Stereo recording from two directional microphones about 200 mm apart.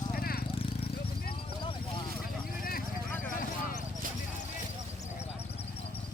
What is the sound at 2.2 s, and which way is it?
Vehicle, 45° left (ahead or behind).